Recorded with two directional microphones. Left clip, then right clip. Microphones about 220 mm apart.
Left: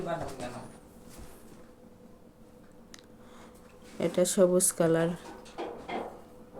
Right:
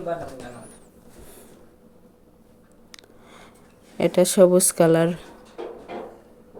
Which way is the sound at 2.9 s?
35° right (ahead or behind).